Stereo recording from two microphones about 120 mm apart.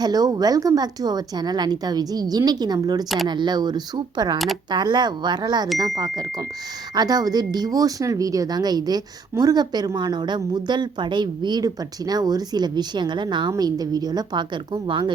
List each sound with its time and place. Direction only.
0.0 s speech: 35° right (ahead or behind)